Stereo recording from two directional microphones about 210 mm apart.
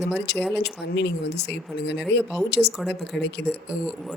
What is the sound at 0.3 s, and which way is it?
Speech, 5° left (ahead or behind).